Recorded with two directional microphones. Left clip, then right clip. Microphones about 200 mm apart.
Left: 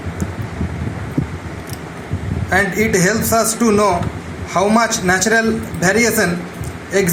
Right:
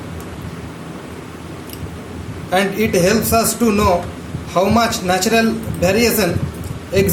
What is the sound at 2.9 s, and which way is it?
A man's voice, 15° left (ahead or behind).